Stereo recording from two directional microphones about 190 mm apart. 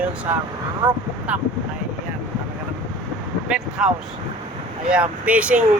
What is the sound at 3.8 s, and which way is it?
Speech, 5° right (ahead or behind).